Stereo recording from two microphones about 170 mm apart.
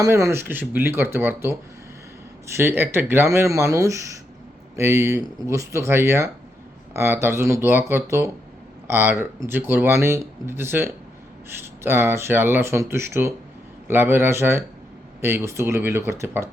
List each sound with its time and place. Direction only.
0.0 s speech: 15° right (ahead or behind)
2.6 s speech: 15° right (ahead or behind)